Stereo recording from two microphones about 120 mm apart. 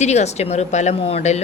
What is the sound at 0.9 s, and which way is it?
Speech, 60° left (ahead or behind).